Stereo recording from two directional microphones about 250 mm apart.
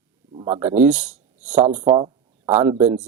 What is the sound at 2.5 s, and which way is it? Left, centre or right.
Speech, centre.